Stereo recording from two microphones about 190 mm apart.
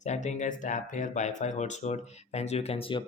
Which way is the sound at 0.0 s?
40° left (ahead or behind).